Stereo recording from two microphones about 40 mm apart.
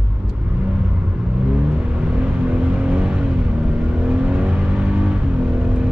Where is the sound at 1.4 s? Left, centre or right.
Right.